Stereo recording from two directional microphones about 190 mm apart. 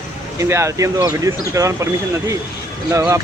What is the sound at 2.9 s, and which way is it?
Speech, 15° right (ahead or behind).